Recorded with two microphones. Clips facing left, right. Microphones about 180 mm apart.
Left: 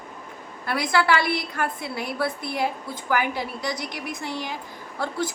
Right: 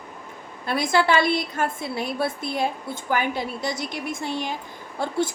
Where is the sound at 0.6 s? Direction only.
25° right (ahead or behind).